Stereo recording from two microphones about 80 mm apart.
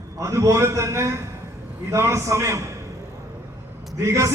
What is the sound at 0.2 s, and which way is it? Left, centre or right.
Speech, right.